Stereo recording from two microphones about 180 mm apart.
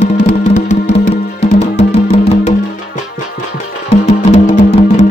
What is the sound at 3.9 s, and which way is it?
Music, 45° left (ahead or behind).